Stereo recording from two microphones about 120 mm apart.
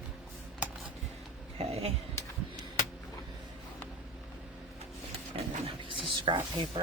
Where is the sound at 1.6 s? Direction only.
60° right (ahead or behind).